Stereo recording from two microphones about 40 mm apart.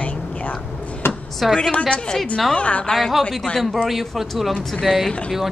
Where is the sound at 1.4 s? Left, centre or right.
Centre.